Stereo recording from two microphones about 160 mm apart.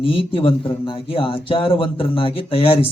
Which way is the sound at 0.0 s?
35° left (ahead or behind).